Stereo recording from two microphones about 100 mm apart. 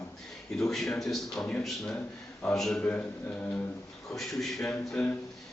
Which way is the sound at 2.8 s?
15° left (ahead or behind).